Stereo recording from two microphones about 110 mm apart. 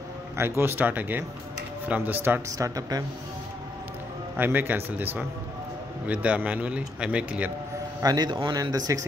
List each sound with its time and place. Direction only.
0.4 s a man's voice: 20° right (ahead or behind)
2.5 s speech: 35° right (ahead or behind)
4.4 s a man's voice: 15° right (ahead or behind)
8.0 s speech: 35° right (ahead or behind)